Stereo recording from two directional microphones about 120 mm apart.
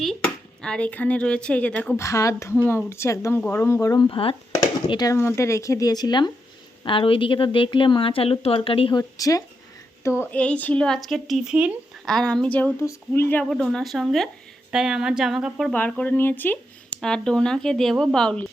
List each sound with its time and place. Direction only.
0.0 s speech: 5° left (ahead or behind); by 3.9 s 25° left (ahead or behind)
3.9 s a woman's voice: 40° left (ahead or behind)
4.9 s speech: 35° left (ahead or behind)
5.1 s a woman's voice: 20° left (ahead or behind); by 9.0 s 50° left (ahead or behind)
9.0 s speech: 30° left (ahead or behind)
10.3 s speech: 10° left (ahead or behind); by 11.7 s 10° right (ahead or behind)
12.0 s speech: 5° left (ahead or behind)
12.8 s speech: 20° left (ahead or behind)
13.4 s speech: centre (ahead or behind)
15.7 s speech: 10° left (ahead or behind)